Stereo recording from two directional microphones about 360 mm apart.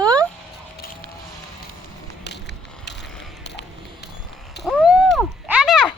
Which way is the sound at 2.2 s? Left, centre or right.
Left.